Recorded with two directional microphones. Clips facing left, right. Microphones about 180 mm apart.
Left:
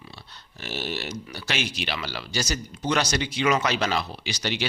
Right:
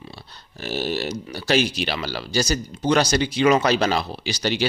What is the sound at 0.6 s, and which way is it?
A man's voice, 35° right (ahead or behind).